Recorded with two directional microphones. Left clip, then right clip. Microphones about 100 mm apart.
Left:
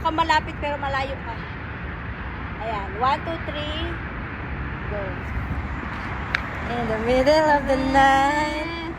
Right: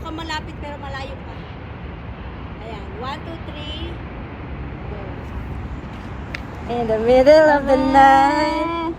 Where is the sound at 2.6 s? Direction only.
5° left (ahead or behind).